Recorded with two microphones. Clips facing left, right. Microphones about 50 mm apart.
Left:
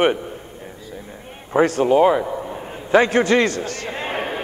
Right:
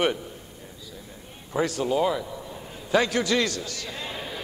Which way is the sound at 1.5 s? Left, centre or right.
Left.